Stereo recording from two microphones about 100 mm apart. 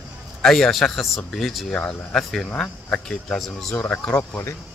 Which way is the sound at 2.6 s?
15° left (ahead or behind).